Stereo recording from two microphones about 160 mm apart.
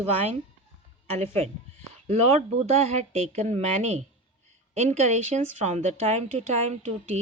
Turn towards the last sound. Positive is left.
turn(degrees=-45)  # may be behind; listen again after turning